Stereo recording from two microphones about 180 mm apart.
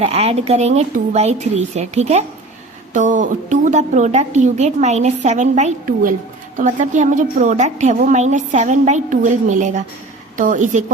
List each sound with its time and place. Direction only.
0.0 s a woman's voice: 35° right (ahead or behind)